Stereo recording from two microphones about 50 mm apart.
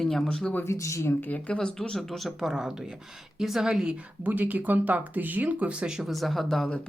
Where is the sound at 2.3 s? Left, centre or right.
Centre.